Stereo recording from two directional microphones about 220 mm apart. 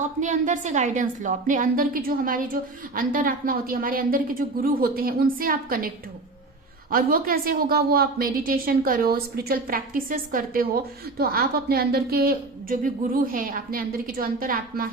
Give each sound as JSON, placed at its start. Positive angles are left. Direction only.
{"t": 0.2, "sound": "a woman's voice", "side_deg": -35}
{"t": 6.9, "sound": "a woman's voice", "side_deg": -40}